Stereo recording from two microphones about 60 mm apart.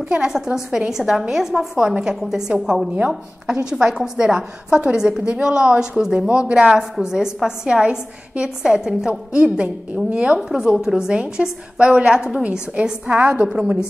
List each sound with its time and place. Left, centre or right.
0.1 s a woman's voice: centre